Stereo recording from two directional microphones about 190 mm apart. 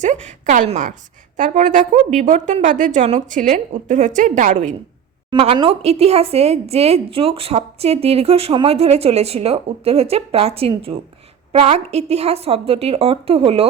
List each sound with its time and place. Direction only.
0.0 s a woman's voice: 40° right (ahead or behind)
5.3 s a woman's voice: 25° right (ahead or behind)